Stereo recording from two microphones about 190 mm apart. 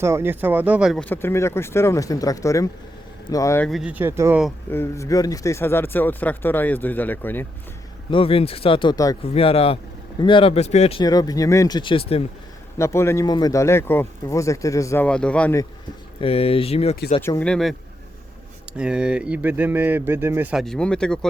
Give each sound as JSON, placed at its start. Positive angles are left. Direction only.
{"t": 0.0, "sound": "speech", "side_deg": -15}
{"t": 3.7, "sound": "speech", "side_deg": -5}
{"t": 4.7, "sound": "speech", "side_deg": 15}
{"t": 8.1, "sound": "speech", "side_deg": 30}
{"t": 9.2, "sound": "speech", "side_deg": 30}
{"t": 11.0, "sound": "speech", "side_deg": 20}
{"t": 12.7, "sound": "speech", "side_deg": 15}
{"t": 16.2, "sound": "speech", "side_deg": 30}
{"t": 17.2, "sound": "speech", "side_deg": 10}
{"t": 18.8, "sound": "speech", "side_deg": -5}